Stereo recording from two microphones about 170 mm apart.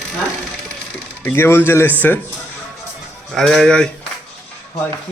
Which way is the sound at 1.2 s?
10° left (ahead or behind).